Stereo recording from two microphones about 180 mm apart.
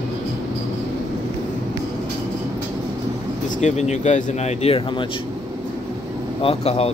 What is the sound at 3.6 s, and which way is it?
Speech, 40° left (ahead or behind).